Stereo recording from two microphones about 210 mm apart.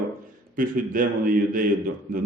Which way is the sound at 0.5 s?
40° right (ahead or behind).